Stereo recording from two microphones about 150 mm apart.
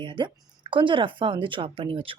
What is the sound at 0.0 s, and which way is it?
A woman's voice, 35° right (ahead or behind).